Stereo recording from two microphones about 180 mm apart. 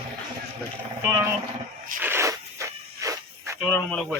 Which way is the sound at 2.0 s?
15° right (ahead or behind).